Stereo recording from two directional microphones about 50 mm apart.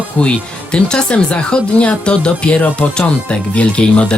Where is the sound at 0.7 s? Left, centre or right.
Left.